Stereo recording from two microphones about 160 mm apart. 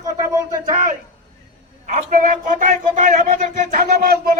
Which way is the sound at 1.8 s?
55° right (ahead or behind).